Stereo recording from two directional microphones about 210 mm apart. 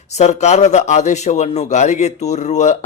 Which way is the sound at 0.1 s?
35° left (ahead or behind).